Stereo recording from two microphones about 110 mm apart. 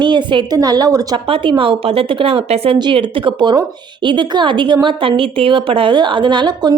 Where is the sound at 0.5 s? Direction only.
35° right (ahead or behind).